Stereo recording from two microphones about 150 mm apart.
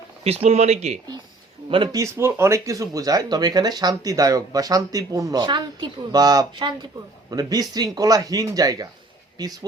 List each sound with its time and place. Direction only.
0.3 s speech: 45° right (ahead or behind)
1.7 s speech: 35° right (ahead or behind)
2.0 s speech: 20° right (ahead or behind)